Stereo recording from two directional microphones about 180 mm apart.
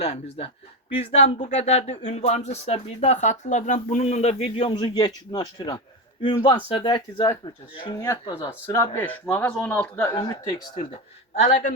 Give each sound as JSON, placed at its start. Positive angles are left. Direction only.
{"t": 0.0, "sound": "speech", "side_deg": 35}
{"t": 10.2, "sound": "speech", "side_deg": 20}